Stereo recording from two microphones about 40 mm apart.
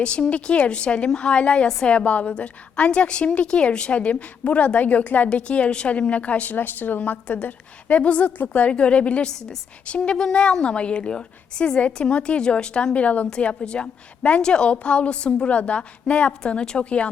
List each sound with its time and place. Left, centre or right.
0.0 s a woman's voice: left
6.6 s a woman's voice: left
10.0 s a woman's voice: centre